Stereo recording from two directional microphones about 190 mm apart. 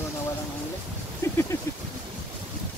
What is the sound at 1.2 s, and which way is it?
Speech, 15° left (ahead or behind).